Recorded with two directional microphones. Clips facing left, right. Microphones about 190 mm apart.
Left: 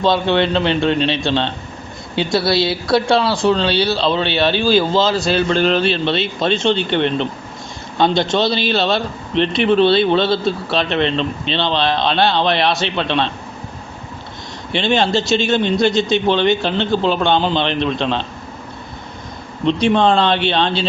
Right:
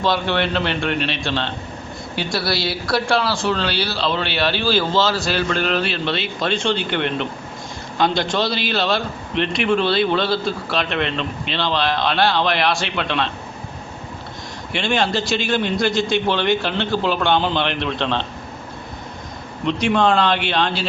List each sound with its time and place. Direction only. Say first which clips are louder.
0.0 s speech: left 5 dB; 20° left (ahead or behind)
14.7 s speech: left 4 dB; 25° left (ahead or behind)
19.6 s speech: left 4 dB; 25° left (ahead or behind)